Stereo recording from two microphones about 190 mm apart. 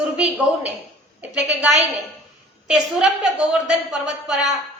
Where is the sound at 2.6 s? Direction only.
5° right (ahead or behind).